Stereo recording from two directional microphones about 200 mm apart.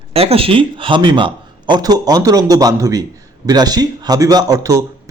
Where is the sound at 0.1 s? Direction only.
30° right (ahead or behind).